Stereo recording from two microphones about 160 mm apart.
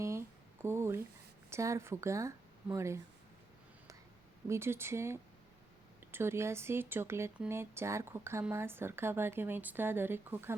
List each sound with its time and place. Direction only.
0.0 s a sound: 15° right (ahead or behind)
1.5 s speech: 20° right (ahead or behind)
4.4 s speech: 15° right (ahead or behind)